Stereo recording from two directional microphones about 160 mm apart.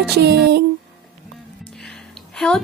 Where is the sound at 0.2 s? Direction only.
90° right.